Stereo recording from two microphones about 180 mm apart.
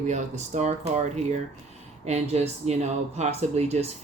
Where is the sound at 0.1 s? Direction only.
40° right (ahead or behind).